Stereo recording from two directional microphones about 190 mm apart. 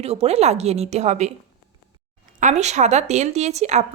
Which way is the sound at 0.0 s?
35° right (ahead or behind).